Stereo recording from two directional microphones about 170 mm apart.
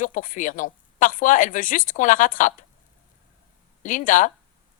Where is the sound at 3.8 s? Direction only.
50° left (ahead or behind).